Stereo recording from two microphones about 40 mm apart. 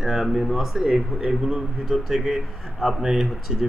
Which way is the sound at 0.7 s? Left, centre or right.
Right.